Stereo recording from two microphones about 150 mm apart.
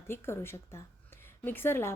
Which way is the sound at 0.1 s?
15° left (ahead or behind).